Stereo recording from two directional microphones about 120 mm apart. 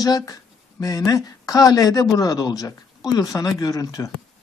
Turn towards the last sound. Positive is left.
turn(degrees=30)  # may be behind; listen again after turning